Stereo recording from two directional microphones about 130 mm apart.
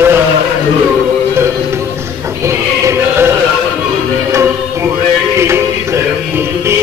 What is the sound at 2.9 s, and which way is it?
Chant, 20° right (ahead or behind).